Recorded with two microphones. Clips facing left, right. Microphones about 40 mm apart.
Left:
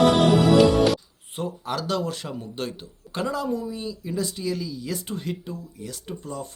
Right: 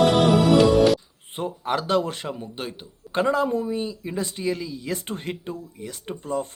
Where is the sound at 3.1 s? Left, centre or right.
Right.